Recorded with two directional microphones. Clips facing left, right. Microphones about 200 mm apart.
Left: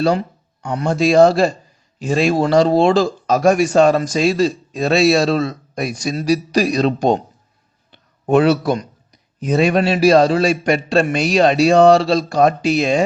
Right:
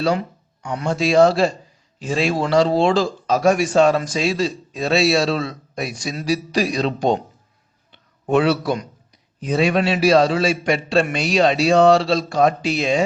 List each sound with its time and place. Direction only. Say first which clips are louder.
0.6 s a man's voice: left 4 dB; 45° left (ahead or behind)
7.9 s a sound: left 4 dB; 45° left (ahead or behind)
9.4 s a man's voice: left 3 dB; 45° left (ahead or behind)